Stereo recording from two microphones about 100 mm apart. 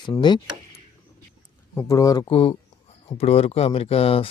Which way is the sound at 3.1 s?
85° left.